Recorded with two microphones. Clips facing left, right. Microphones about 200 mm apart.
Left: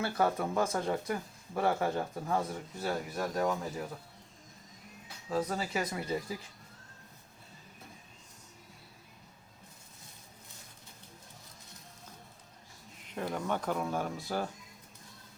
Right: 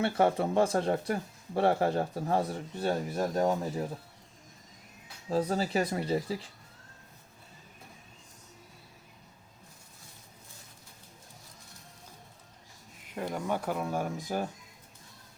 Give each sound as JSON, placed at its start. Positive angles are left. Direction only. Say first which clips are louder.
{"t": 0.0, "sound": "speech", "louder": "right 4 dB", "side_deg": -25}
{"t": 5.3, "sound": "speech", "louder": "right 4 dB", "side_deg": -30}
{"t": 13.1, "sound": "speech", "louder": "right 1 dB", "side_deg": -10}